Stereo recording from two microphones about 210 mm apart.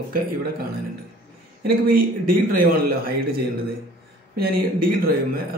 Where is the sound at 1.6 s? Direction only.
45° right (ahead or behind).